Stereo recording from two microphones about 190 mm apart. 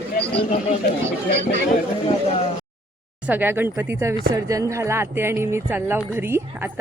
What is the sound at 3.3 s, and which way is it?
Speech, 10° right (ahead or behind).